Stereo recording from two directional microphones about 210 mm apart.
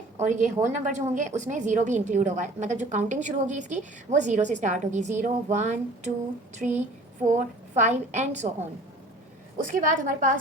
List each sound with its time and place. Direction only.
0.2 s a woman's voice: 35° right (ahead or behind)
9.6 s a woman's voice: 40° right (ahead or behind)